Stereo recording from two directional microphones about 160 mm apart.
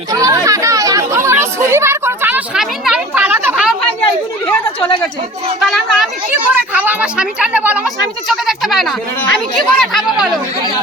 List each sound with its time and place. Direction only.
0.1 s chatter: 20° right (ahead or behind); by 3.8 s 5° right (ahead or behind)
5.5 s speech: centre (ahead or behind)
6.5 s speech: 10° right (ahead or behind)